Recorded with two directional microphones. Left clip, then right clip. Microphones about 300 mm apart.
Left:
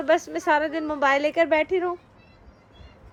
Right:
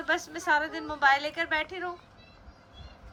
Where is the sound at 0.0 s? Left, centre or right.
Centre.